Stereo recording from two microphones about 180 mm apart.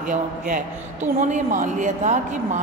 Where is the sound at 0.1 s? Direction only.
45° right (ahead or behind).